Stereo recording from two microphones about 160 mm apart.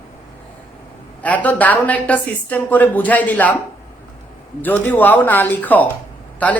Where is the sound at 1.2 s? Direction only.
10° left (ahead or behind).